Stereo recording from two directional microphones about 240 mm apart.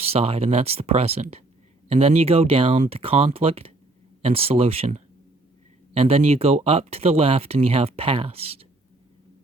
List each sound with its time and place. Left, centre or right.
0.0 s speech: right